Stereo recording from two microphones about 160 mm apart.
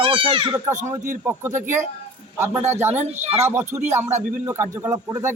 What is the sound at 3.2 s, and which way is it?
Speech, 45° right (ahead or behind).